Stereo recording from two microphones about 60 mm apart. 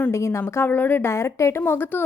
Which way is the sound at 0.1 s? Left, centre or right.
Left.